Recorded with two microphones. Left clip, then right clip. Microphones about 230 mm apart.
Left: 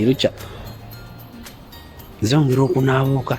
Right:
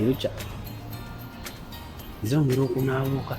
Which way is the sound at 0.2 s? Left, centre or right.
Left.